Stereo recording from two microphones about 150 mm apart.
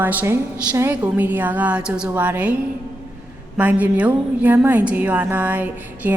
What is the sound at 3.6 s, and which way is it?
A woman's voice, 10° right (ahead or behind).